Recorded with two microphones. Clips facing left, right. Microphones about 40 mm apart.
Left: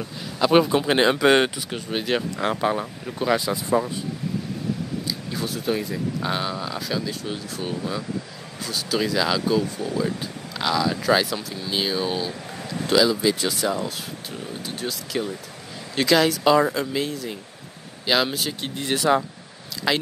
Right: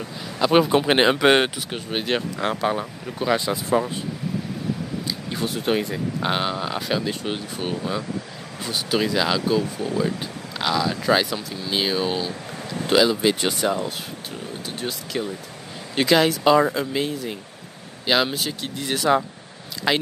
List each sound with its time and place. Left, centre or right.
0.4 s speech: centre
0.8 s speech: right
1.2 s speech: right
2.3 s speech: centre
5.6 s speech: right
8.6 s speech: centre
10.6 s speech: centre; by 13.5 s right
13.5 s speech: centre
15.1 s speech: centre
15.9 s speech: centre
18.6 s speech: centre
18.9 s speech: centre
19.9 s speech: centre